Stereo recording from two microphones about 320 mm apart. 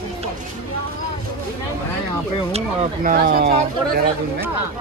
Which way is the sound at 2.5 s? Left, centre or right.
Right.